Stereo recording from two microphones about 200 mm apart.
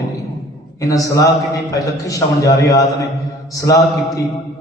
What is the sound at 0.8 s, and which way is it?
A man's voice, 15° left (ahead or behind).